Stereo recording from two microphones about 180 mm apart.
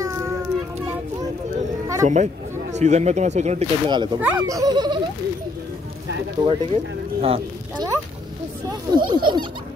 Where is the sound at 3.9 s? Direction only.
25° right (ahead or behind).